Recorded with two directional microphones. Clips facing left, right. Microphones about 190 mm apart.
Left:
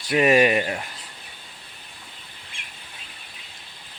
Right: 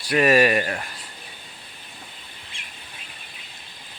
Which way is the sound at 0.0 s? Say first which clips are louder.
Even; 20° left (ahead or behind).